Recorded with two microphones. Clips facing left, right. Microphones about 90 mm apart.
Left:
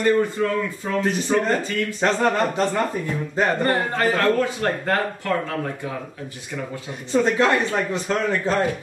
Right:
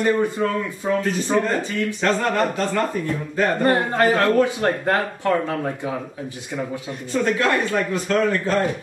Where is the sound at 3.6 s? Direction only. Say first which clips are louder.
Right 3 dB; 15° right (ahead or behind).